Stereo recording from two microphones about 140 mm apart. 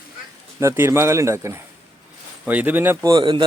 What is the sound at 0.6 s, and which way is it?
A man's voice, 20° right (ahead or behind).